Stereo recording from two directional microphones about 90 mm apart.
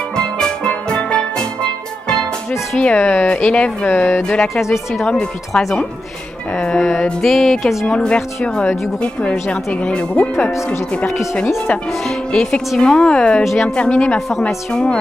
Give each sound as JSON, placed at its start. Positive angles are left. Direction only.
{"t": 0.2, "sound": "music", "side_deg": 10}
{"t": 2.8, "sound": "speech", "side_deg": 15}
{"t": 3.9, "sound": "speech", "side_deg": 25}
{"t": 5.1, "sound": "music", "side_deg": 0}
{"t": 7.8, "sound": "speech", "side_deg": 10}
{"t": 13.4, "sound": "music", "side_deg": 0}
{"t": 13.7, "sound": "speech", "side_deg": 10}